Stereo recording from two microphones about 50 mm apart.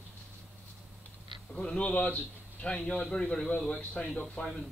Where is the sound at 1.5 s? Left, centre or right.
Centre.